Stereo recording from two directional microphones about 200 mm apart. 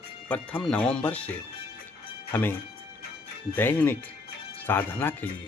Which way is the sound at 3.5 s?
10° left (ahead or behind).